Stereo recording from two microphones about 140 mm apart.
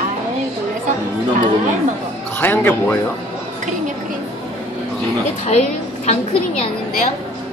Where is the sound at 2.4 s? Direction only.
15° left (ahead or behind).